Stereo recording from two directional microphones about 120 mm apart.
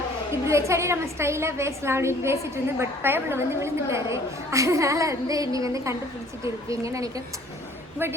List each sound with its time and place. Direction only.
0.4 s a woman's voice: 25° right (ahead or behind)